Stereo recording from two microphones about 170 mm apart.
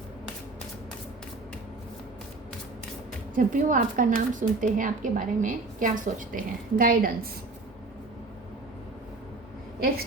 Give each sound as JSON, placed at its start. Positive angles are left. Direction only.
{"t": 3.3, "sound": "a woman's voice", "side_deg": -50}